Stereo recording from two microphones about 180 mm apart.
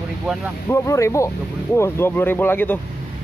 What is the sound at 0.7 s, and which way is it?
Speech, 15° left (ahead or behind).